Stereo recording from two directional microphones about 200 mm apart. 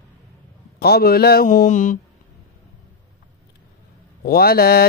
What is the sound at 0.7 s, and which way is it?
Mantra, 50° left (ahead or behind).